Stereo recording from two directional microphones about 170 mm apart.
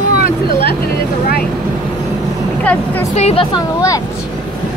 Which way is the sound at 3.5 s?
20° left (ahead or behind).